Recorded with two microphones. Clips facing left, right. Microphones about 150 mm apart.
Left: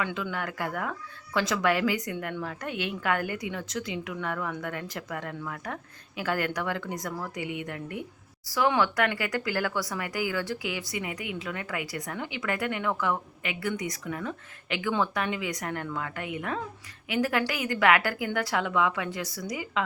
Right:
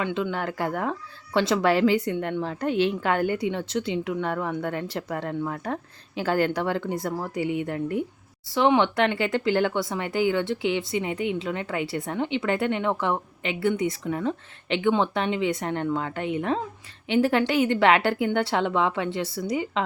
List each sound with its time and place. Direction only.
0.0 s speech: 30° right (ahead or behind)